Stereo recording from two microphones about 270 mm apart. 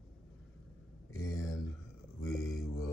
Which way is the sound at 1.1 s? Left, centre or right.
Centre.